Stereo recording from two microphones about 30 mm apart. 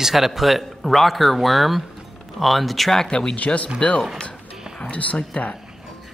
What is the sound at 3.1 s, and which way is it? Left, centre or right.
Speech, left.